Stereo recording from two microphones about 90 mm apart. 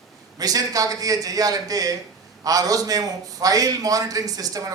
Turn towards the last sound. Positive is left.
turn(degrees=-40)  # may be behind; listen again after turning